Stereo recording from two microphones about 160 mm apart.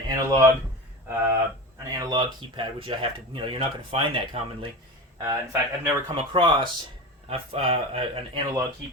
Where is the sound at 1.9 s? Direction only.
25° right (ahead or behind).